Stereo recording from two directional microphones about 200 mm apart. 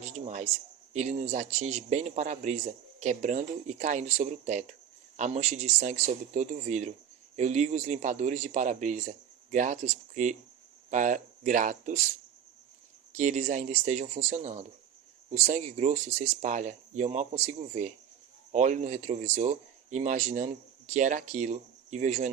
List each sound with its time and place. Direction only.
0.0 s a sound: 35° right (ahead or behind)
0.9 s speech: 35° right (ahead or behind)
13.1 s speech: 40° right (ahead or behind)